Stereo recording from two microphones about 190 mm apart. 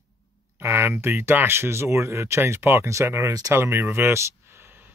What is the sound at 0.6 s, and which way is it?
Speech, 15° right (ahead or behind).